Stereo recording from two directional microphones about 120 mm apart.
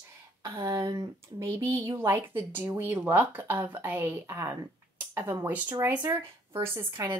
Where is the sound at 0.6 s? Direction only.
30° right (ahead or behind).